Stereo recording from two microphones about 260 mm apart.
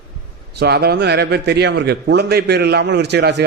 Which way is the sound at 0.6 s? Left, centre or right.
Right.